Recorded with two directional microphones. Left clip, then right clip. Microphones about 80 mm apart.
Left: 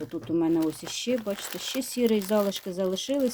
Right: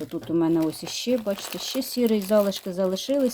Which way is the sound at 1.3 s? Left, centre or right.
Left.